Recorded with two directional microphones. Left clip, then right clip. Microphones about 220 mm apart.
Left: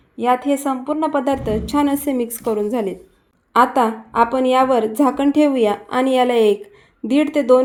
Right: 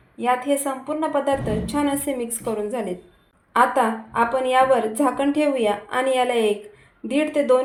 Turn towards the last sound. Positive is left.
turn(degrees=45)  # may be behind; listen again after turning